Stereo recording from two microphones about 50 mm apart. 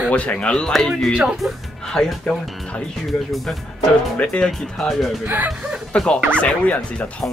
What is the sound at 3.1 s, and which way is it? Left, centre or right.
Speech, centre.